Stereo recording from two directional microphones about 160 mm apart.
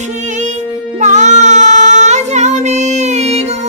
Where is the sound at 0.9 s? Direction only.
45° right (ahead or behind).